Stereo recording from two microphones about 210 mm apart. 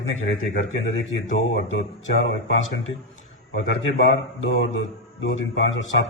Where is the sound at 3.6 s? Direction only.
65° left (ahead or behind).